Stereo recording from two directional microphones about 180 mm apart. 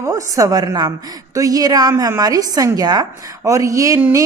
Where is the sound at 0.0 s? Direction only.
15° right (ahead or behind).